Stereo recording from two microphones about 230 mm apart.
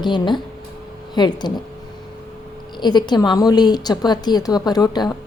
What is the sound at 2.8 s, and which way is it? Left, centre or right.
A woman's voice, centre.